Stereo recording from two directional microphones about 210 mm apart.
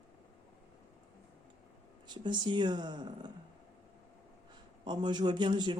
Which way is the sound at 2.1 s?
20° right (ahead or behind).